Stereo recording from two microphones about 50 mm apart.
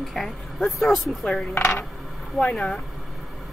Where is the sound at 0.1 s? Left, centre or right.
Centre.